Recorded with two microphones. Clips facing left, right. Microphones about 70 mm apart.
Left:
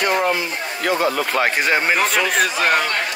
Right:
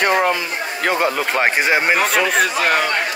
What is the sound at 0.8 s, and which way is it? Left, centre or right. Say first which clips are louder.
Speech: right 1 dB; right.